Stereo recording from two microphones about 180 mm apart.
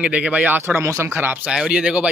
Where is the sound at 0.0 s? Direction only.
5° right (ahead or behind).